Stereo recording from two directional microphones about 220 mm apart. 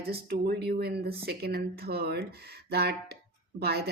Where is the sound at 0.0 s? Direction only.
45° right (ahead or behind).